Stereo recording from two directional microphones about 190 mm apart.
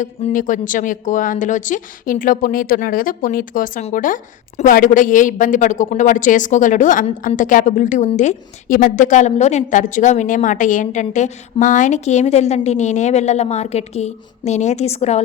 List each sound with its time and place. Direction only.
0.0 s speech: 40° left (ahead or behind)